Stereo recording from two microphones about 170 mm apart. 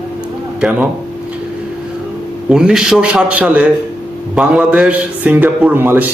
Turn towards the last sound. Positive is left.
turn(degrees=-10)  # may be behind; listen again after turning